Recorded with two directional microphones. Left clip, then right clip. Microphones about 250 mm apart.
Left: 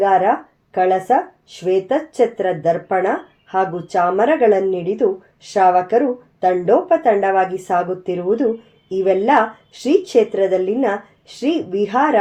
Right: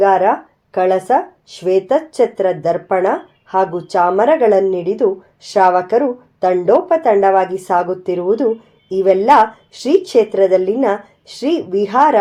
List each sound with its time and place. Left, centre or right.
0.0 s a woman's voice: right